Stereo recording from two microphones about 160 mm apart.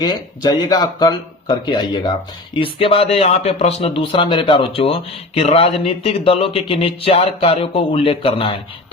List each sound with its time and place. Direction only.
0.0 s a man's voice: 25° left (ahead or behind)